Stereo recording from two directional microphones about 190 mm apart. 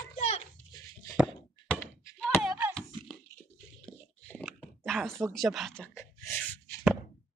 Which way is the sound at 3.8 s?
10° left (ahead or behind).